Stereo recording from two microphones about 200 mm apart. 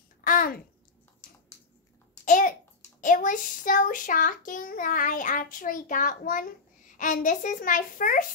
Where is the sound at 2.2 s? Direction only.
40° left (ahead or behind).